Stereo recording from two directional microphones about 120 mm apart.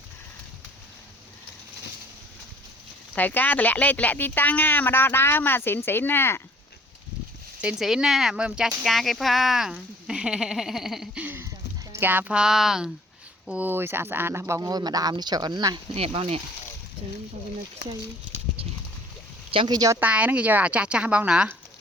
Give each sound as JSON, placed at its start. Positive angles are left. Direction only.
{"t": 3.2, "sound": "speech", "side_deg": 15}
{"t": 7.6, "sound": "speech", "side_deg": -5}
{"t": 13.5, "sound": "speech", "side_deg": -15}
{"t": 16.0, "sound": "speech", "side_deg": -55}
{"t": 19.5, "sound": "speech", "side_deg": -40}
{"t": 20.0, "sound": "speech", "side_deg": -10}